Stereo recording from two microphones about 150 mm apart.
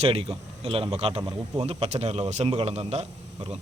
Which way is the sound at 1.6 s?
45° right (ahead or behind).